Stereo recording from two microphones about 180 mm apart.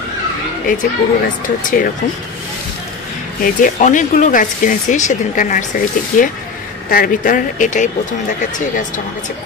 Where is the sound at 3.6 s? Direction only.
45° left (ahead or behind).